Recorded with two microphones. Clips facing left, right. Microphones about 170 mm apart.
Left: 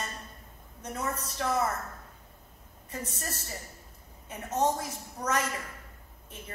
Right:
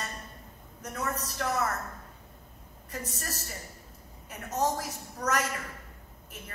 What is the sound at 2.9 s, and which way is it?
Speech, 30° left (ahead or behind).